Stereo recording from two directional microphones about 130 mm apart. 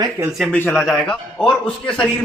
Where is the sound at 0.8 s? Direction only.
5° left (ahead or behind).